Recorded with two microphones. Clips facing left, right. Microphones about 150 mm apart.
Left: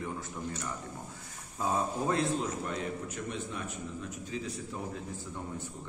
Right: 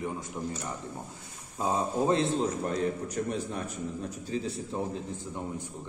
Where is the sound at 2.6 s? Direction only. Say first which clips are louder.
Right 6 dB; 40° right (ahead or behind).